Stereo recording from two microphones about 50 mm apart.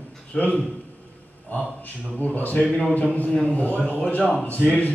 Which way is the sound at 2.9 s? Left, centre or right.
Left.